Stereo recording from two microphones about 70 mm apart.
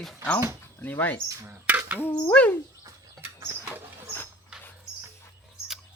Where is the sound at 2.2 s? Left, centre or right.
Left.